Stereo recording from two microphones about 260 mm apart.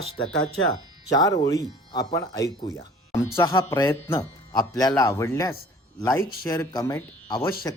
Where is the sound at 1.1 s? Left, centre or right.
Centre.